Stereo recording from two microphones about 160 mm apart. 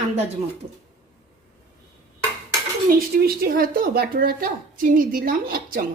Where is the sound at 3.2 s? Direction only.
70° right (ahead or behind).